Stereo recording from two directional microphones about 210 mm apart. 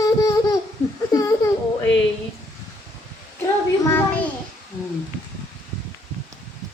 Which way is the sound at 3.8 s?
10° left (ahead or behind).